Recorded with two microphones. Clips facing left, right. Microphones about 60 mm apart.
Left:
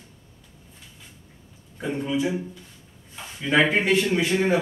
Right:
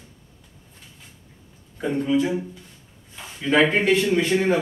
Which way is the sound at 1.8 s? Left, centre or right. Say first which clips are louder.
Right 4 dB; centre.